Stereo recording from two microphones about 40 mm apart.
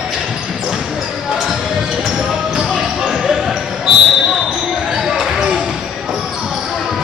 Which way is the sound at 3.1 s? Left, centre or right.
Centre.